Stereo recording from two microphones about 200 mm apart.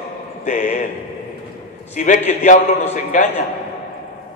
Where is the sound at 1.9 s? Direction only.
40° left (ahead or behind).